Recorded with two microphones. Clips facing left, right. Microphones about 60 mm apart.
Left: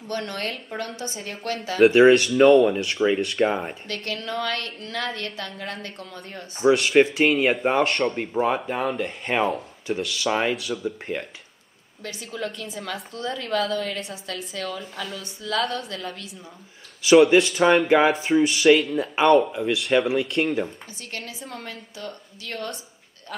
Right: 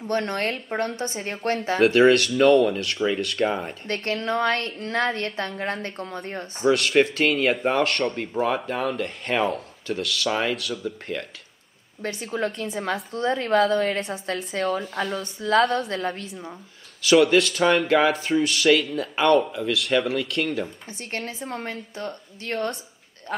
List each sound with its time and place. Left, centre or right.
0.0 s a woman's voice: right
1.9 s speech: centre
3.8 s a woman's voice: right
5.7 s speech: right
6.7 s speech: centre
11.1 s speech: centre
12.1 s speech: right
13.1 s a woman's voice: right
15.6 s a woman's voice: right
15.9 s a woman's voice: right
17.0 s speech: centre
21.0 s a woman's voice: right